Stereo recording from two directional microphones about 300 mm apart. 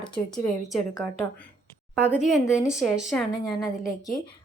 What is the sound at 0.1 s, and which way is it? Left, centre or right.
Speech, centre.